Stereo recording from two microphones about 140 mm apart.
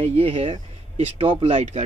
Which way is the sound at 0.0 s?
50° right (ahead or behind).